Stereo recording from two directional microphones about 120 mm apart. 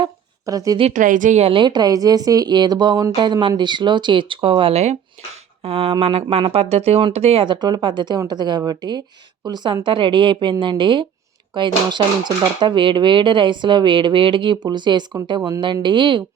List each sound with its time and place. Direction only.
0.0 s a sound: 30° right (ahead or behind)
0.9 s speech: 90° right
1.5 s speech: 40° right (ahead or behind); by 4.9 s 65° right (ahead or behind)
5.6 s speech: 50° right (ahead or behind)
7.4 s speech: 40° right (ahead or behind)